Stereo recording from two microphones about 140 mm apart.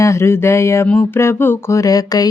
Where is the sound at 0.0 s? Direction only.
20° left (ahead or behind).